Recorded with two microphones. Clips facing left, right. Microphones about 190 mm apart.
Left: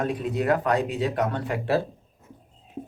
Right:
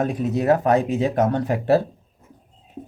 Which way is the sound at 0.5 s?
25° right (ahead or behind).